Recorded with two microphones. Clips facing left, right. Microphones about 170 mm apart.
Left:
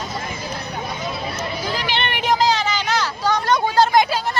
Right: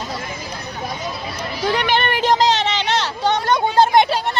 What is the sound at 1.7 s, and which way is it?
Speech, 70° right (ahead or behind).